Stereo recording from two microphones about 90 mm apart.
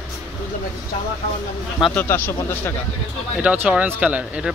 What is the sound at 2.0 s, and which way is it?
Speech, 20° left (ahead or behind).